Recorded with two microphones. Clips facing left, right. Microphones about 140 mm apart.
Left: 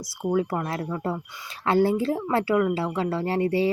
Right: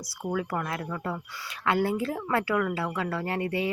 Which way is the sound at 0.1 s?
25° left (ahead or behind).